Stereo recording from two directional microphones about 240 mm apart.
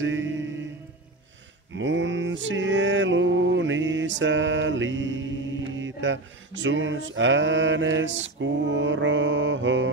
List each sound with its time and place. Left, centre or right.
0.0 s mantra: right
1.8 s mantra: right